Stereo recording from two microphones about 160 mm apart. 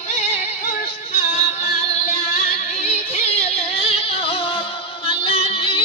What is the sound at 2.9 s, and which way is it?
Music, 40° left (ahead or behind).